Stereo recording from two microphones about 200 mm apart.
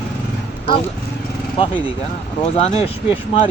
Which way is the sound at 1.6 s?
25° left (ahead or behind).